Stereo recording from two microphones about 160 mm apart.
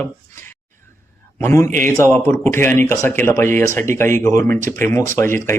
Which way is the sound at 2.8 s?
15° left (ahead or behind).